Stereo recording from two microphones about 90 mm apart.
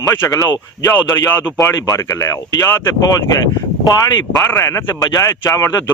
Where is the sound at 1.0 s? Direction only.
25° left (ahead or behind).